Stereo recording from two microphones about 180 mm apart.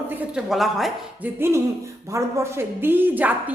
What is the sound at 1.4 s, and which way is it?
A woman's voice, 15° right (ahead or behind).